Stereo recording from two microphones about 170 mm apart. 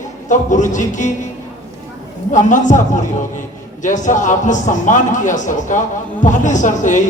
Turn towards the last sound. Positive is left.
turn(degrees=50)  # may be behind; listen again after turning